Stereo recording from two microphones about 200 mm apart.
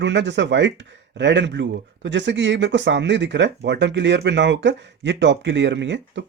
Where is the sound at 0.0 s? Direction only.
60° right (ahead or behind).